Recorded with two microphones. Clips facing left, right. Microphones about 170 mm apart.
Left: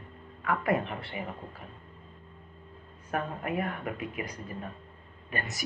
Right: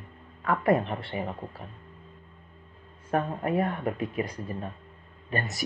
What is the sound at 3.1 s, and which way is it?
Speech, 30° right (ahead or behind).